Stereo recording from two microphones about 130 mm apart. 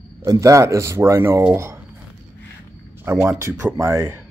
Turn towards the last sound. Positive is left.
turn(degrees=-20)  # may be behind; listen again after turning